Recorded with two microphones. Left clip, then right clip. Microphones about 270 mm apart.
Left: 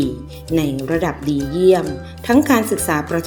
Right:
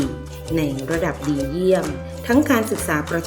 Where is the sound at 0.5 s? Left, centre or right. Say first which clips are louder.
Left 3 dB; centre.